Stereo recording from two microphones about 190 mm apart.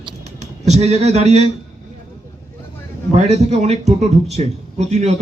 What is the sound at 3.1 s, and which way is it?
A man's voice, 35° right (ahead or behind).